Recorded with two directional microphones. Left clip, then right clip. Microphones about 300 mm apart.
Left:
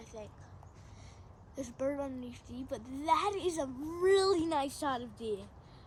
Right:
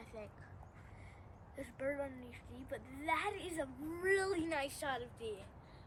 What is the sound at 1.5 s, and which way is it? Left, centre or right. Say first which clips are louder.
A woman's voice: left 5 dB; centre.